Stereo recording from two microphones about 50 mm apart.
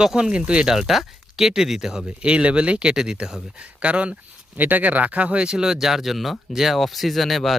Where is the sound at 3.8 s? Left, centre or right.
Right.